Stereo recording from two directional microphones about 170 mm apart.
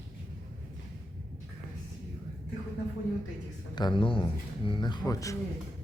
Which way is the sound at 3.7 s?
25° left (ahead or behind).